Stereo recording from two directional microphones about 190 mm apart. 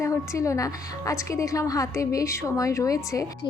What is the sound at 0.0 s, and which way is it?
A woman's voice, 15° left (ahead or behind).